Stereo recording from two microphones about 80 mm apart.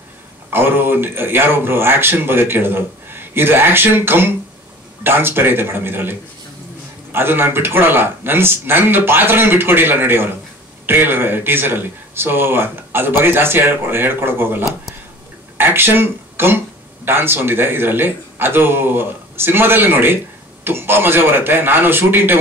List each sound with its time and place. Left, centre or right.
0.5 s speech: right